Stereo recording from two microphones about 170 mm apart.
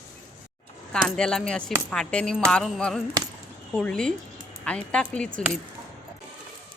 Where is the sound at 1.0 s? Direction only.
5° left (ahead or behind).